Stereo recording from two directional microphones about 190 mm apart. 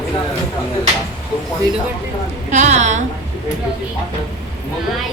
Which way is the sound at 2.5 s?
40° right (ahead or behind).